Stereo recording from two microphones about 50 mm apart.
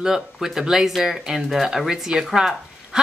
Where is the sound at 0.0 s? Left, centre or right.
Centre.